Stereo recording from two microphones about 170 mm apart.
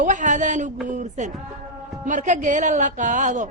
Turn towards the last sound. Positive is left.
turn(degrees=-45)  # may be behind; listen again after turning